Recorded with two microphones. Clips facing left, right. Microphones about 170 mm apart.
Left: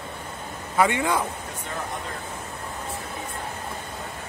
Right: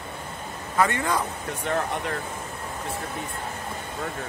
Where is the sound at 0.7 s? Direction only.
15° left (ahead or behind).